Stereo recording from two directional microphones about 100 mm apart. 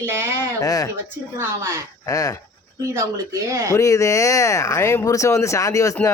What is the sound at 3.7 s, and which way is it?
Speech, 35° left (ahead or behind).